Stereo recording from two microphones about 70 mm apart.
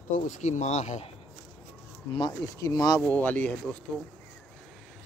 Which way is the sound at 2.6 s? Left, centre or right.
Left.